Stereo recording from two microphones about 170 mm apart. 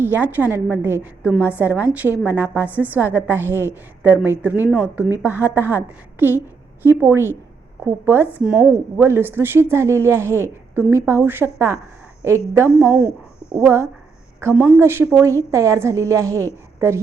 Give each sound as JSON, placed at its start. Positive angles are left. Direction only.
{"t": 0.0, "sound": "a woman's voice", "side_deg": -10}